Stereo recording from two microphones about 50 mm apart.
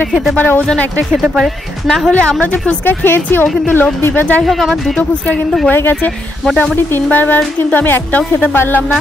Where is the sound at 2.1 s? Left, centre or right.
Left.